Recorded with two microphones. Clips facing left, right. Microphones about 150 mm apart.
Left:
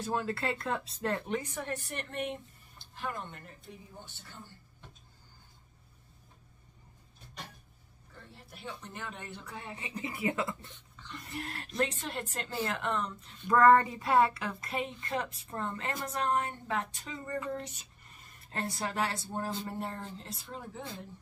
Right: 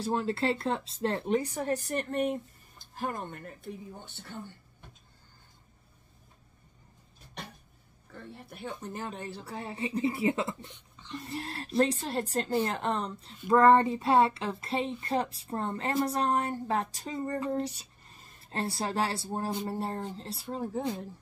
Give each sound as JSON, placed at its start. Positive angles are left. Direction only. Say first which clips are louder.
{"t": 0.0, "sound": "speech", "louder": "right 4 dB", "side_deg": -30}
{"t": 8.1, "sound": "speech", "louder": "right 7 dB", "side_deg": -55}
{"t": 10.7, "sound": "a sound", "louder": "right 6 dB", "side_deg": -20}
{"t": 11.2, "sound": "speech", "louder": "right 2 dB", "side_deg": -30}